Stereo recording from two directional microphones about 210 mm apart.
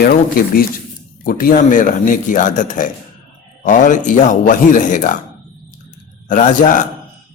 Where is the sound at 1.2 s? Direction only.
40° left (ahead or behind).